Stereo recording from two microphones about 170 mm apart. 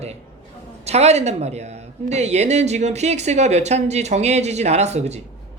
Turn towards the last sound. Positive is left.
turn(degrees=-40)  # may be behind; listen again after turning